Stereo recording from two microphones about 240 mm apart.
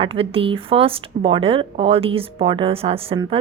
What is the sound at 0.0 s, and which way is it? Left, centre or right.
Speech, right.